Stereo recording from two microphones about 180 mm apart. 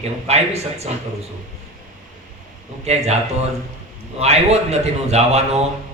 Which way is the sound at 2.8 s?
35° right (ahead or behind).